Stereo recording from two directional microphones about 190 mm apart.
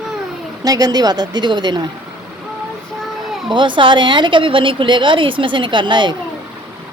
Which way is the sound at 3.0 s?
Centre (ahead or behind).